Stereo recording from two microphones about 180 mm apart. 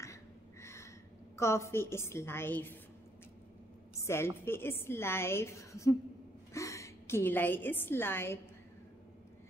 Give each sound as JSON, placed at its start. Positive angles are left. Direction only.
{"t": 0.0, "sound": "a sound", "side_deg": 15}
{"t": 1.3, "sound": "a woman's voice", "side_deg": 15}
{"t": 4.0, "sound": "a woman's voice", "side_deg": 15}